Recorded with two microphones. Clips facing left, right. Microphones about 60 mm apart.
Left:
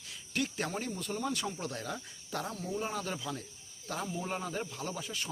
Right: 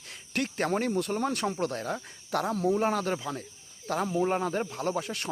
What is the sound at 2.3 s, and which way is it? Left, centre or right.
Speech, right.